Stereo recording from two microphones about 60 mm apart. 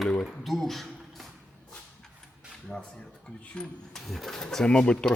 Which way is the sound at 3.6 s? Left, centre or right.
Centre.